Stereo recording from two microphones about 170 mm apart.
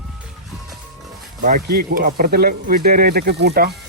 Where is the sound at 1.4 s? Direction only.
60° right (ahead or behind).